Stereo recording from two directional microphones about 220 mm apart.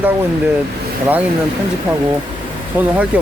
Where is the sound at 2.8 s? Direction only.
5° right (ahead or behind).